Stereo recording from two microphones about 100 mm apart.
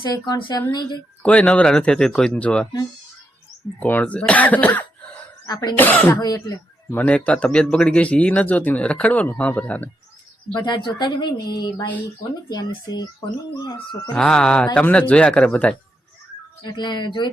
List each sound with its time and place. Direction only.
0.0 s a woman's voice: 50° left (ahead or behind)
1.2 s a man's voice: 10° left (ahead or behind)
3.8 s a man's voice: 15° left (ahead or behind)
5.5 s speech: 40° left (ahead or behind)
5.7 s speech: 20° left (ahead or behind)
6.1 s speech: 40° left (ahead or behind)
6.9 s a man's voice: 15° left (ahead or behind)
10.5 s a woman's voice: 50° left (ahead or behind)
14.1 s a man's voice: 10° left (ahead or behind)
16.6 s a woman's voice: 50° left (ahead or behind)